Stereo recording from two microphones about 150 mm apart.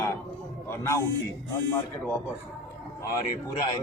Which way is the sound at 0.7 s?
20° left (ahead or behind).